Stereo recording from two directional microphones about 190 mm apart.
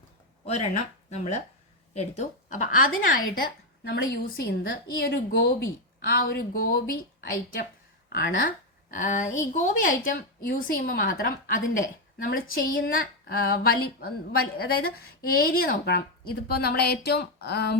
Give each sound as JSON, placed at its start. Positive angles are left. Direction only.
{"t": 0.4, "sound": "a woman's voice", "side_deg": 35}